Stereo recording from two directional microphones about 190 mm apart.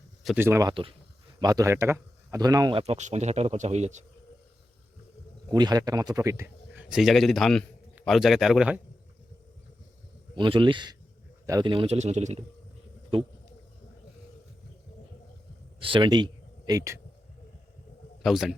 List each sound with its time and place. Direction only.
0.3 s speech: 15° right (ahead or behind)
0.7 s a man's voice: 30° right (ahead or behind)
2.8 s speech: 35° right (ahead or behind)
5.5 s speech: 20° right (ahead or behind); by 8.8 s 5° right (ahead or behind)
10.3 s speech: 25° right (ahead or behind)
15.8 s speech: 25° right (ahead or behind)
18.2 s a man's voice: centre (ahead or behind)